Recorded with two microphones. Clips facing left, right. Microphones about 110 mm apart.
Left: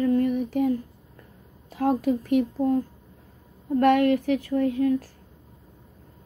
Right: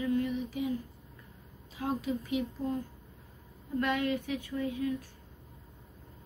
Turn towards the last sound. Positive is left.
turn(degrees=60)  # may be behind; listen again after turning